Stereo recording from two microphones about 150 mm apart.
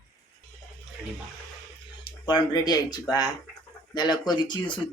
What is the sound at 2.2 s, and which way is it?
Speech, 30° left (ahead or behind).